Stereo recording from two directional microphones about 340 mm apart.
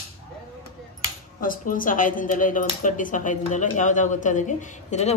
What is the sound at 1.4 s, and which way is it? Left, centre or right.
Speech, left.